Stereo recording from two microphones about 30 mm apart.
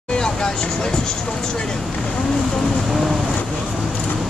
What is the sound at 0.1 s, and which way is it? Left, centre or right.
Speech, left.